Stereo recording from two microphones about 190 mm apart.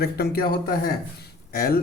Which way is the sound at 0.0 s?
55° left (ahead or behind).